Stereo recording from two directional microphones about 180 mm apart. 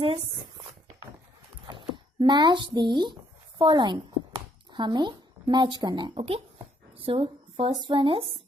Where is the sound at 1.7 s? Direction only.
25° right (ahead or behind).